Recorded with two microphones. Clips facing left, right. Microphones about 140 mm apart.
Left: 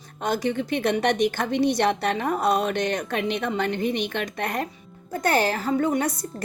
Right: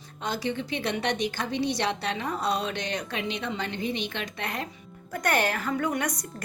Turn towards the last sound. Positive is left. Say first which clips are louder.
# left 5 dB
turn(degrees=30)  # may be behind; listen again after turning